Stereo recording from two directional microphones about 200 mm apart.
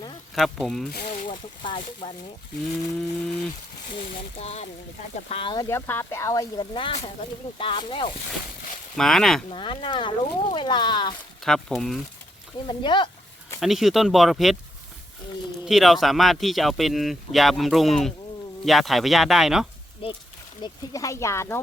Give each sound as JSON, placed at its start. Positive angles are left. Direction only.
{"t": 0.3, "sound": "speech", "side_deg": 0}
{"t": 1.0, "sound": "a sound", "side_deg": 35}
{"t": 1.3, "sound": "a sound", "side_deg": 25}
{"t": 3.2, "sound": "speech", "side_deg": 5}
{"t": 4.4, "sound": "speech", "side_deg": 30}
{"t": 5.6, "sound": "speech", "side_deg": 15}
{"t": 9.0, "sound": "speech", "side_deg": 0}
{"t": 9.5, "sound": "speech", "side_deg": 25}
{"t": 11.4, "sound": "speech", "side_deg": 0}
{"t": 12.6, "sound": "speech", "side_deg": 25}
{"t": 13.6, "sound": "speech", "side_deg": 0}
{"t": 15.6, "sound": "speech", "side_deg": 0}
{"t": 20.6, "sound": "speech", "side_deg": 15}